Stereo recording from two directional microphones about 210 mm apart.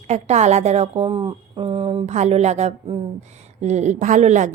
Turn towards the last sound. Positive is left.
turn(degrees=-35)  # may be behind; listen again after turning